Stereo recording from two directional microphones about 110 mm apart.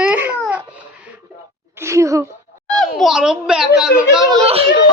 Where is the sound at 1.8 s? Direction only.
25° right (ahead or behind).